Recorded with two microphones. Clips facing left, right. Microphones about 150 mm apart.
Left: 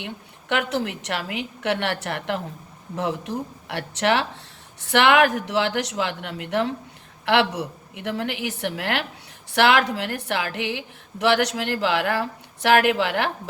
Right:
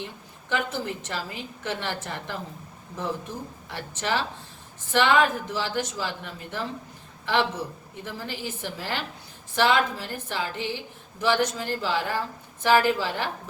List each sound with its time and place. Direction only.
0.0 s a woman's voice: 70° left (ahead or behind)